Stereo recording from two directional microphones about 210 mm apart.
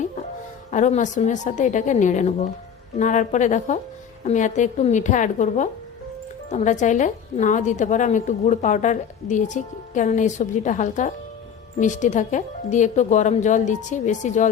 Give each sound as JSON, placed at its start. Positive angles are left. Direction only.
{"t": 0.7, "sound": "a woman's voice", "side_deg": 35}